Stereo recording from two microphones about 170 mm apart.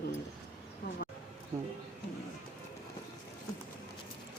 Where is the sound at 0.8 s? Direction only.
70° left (ahead or behind).